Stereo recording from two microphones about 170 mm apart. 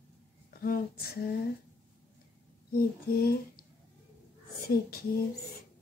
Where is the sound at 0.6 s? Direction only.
60° left (ahead or behind).